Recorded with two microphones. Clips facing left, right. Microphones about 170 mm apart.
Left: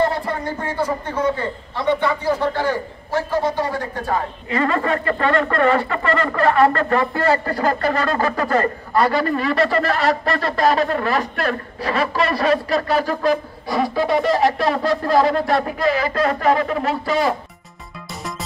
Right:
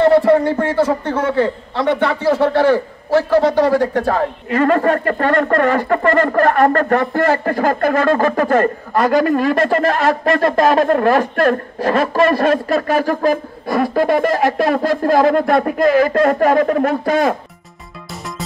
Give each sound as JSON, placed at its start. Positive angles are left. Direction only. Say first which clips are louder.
{"t": 0.0, "sound": "a man's voice", "louder": "right 10 dB", "side_deg": -70}
{"t": 4.5, "sound": "speech", "louder": "right 5 dB", "side_deg": -50}